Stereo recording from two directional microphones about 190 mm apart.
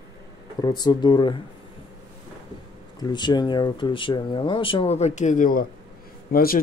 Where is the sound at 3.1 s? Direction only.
20° left (ahead or behind).